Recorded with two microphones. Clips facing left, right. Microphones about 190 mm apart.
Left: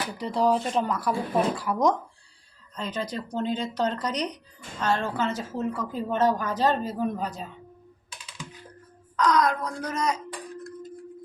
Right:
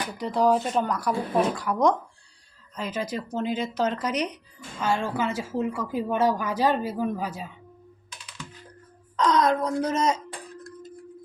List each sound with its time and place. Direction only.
0.0 s speech: centre (ahead or behind)
2.7 s a woman's voice: 5° right (ahead or behind)
9.1 s speech: 25° right (ahead or behind)